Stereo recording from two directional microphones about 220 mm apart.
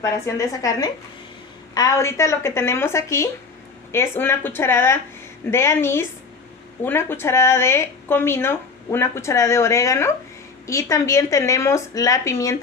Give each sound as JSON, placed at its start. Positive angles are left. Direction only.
{"t": 0.0, "sound": "speech", "side_deg": 15}